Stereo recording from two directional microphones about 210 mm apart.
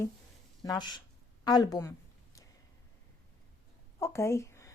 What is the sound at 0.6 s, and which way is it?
A woman's voice, 20° left (ahead or behind).